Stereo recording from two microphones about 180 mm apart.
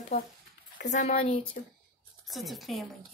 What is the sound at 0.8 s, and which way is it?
Speech, 70° left (ahead or behind).